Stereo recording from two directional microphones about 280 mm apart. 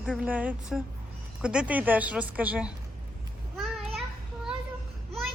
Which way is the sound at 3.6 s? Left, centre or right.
Centre.